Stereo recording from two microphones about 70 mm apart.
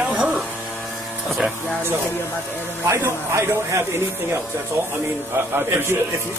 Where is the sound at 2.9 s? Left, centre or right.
Right.